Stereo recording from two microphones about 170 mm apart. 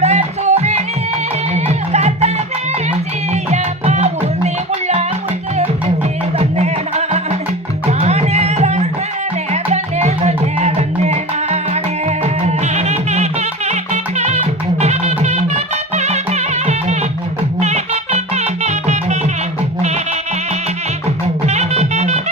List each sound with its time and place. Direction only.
0.0 s music: 40° right (ahead or behind)
3.5 s music: 40° right (ahead or behind)
6.4 s music: 40° right (ahead or behind)
21.4 s music: 40° right (ahead or behind)